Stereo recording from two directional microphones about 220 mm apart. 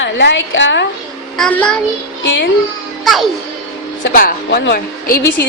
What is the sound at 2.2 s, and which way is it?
Speech, 55° left (ahead or behind).